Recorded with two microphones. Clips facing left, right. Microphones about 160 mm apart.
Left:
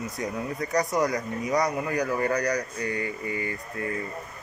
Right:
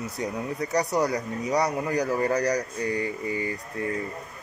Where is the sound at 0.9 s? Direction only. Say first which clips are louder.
Even; 35° right (ahead or behind).